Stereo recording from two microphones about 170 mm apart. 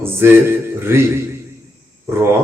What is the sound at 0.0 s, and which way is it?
Speech, 15° right (ahead or behind).